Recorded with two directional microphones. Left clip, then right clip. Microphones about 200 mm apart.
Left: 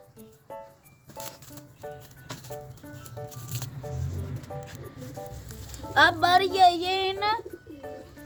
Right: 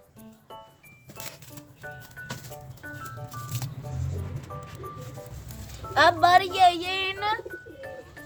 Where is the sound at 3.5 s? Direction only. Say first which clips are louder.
Right 1 dB; 10° left (ahead or behind).